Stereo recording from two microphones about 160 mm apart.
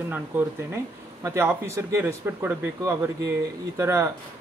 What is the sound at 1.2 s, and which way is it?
Speech, 20° right (ahead or behind).